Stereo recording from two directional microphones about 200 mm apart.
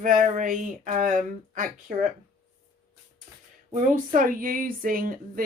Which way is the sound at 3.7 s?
40° right (ahead or behind).